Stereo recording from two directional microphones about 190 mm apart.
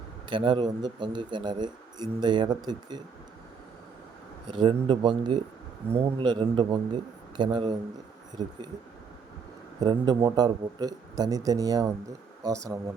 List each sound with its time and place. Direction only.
0.3 s speech: 25° right (ahead or behind)
4.4 s speech: 25° right (ahead or behind)
9.8 s speech: 20° right (ahead or behind)